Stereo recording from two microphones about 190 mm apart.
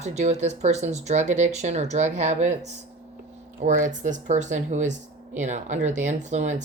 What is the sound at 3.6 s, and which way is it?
Speech, 40° right (ahead or behind).